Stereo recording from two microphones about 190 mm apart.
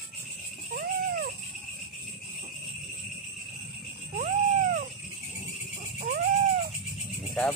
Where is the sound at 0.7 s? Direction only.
55° right (ahead or behind).